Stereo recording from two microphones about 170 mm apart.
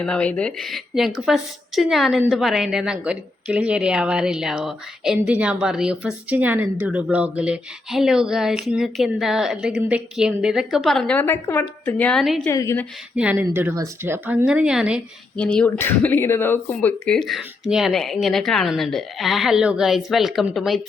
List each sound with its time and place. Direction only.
0.0 s a woman's voice: 5° left (ahead or behind)
12.5 s a woman's voice: 20° left (ahead or behind)
13.1 s speech: 10° right (ahead or behind)
15.4 s a woman's voice: 5° left (ahead or behind)